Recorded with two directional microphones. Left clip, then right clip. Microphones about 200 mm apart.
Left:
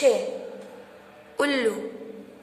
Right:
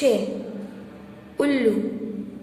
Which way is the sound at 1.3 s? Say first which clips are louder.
Right 1 dB; 35° left (ahead or behind).